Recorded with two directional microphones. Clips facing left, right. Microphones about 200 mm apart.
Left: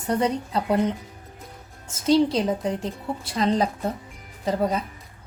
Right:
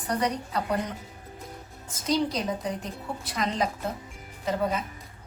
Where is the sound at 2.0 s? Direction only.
30° left (ahead or behind).